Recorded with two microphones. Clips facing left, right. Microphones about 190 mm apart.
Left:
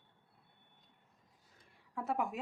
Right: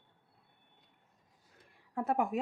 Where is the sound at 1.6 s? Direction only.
55° right (ahead or behind).